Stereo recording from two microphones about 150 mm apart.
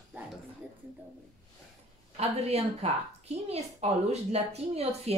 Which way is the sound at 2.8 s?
45° right (ahead or behind).